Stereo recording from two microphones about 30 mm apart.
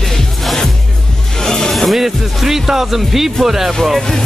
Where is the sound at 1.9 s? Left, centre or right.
Centre.